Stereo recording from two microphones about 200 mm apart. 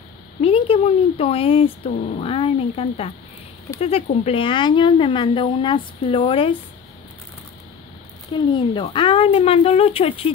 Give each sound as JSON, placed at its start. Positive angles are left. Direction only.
{"t": 0.4, "sound": "speech", "side_deg": 30}
{"t": 8.3, "sound": "speech", "side_deg": 25}